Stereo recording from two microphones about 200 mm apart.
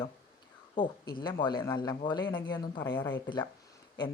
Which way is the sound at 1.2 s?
20° left (ahead or behind).